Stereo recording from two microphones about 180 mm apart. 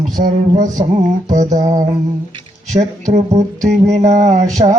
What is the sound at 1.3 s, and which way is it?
Music, 20° right (ahead or behind).